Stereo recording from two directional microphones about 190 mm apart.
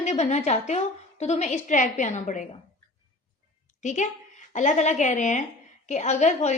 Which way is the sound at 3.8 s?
40° left (ahead or behind).